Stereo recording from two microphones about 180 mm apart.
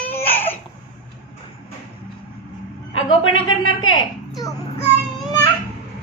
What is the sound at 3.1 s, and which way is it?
Speech, 90° left.